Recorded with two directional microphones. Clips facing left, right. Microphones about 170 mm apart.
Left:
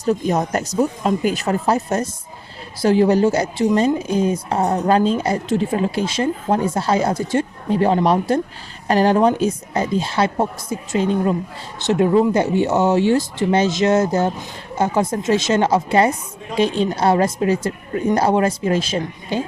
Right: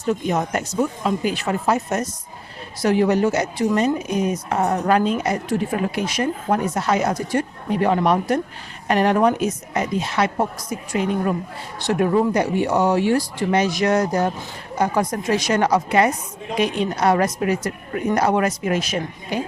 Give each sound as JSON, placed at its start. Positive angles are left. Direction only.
{"t": 0.0, "sound": "a woman's voice", "side_deg": 35}